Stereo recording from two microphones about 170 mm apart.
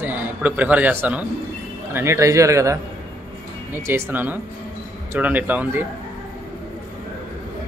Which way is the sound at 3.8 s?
15° right (ahead or behind).